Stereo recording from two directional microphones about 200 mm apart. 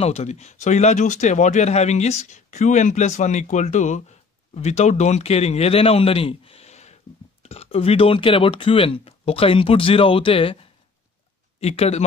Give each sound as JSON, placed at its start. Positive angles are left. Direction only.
{"t": 0.0, "sound": "speech", "side_deg": 30}